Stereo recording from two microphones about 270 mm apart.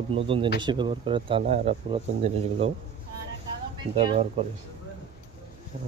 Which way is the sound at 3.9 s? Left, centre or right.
Right.